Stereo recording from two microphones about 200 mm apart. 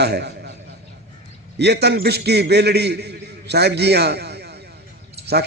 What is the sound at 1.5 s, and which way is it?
A man's voice, 55° right (ahead or behind).